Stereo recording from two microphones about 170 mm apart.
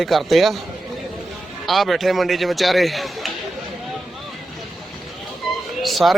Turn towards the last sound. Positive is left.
turn(degrees=0)  # may be behind; listen again after turning